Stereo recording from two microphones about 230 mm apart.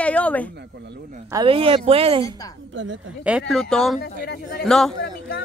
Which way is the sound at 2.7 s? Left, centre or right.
Right.